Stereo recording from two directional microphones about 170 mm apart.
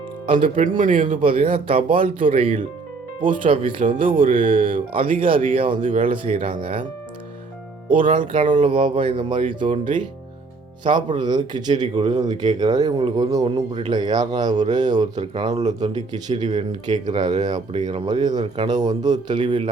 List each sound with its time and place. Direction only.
0.6 s speech: 50° right (ahead or behind)
1.6 s speech: 30° right (ahead or behind)
4.1 s speech: 55° right (ahead or behind)
4.4 s speech: 30° right (ahead or behind)
7.9 s speech: 30° right (ahead or behind)
8.4 s speech: 45° right (ahead or behind)
8.6 s speech: 30° right (ahead or behind)
16.3 s speech: 40° right (ahead or behind)
18.0 s speech: 25° right (ahead or behind)